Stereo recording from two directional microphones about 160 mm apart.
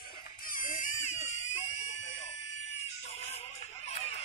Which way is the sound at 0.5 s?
55° left (ahead or behind).